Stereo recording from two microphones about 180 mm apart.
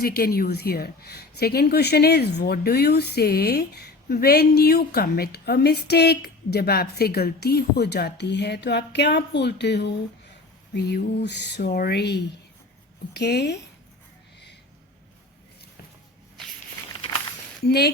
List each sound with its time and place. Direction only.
0.0 s a woman's voice: 60° left (ahead or behind)
17.7 s speech: 65° left (ahead or behind)